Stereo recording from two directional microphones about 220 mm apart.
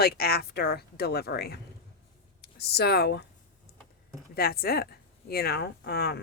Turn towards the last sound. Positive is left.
turn(degrees=45)  # may be behind; listen again after turning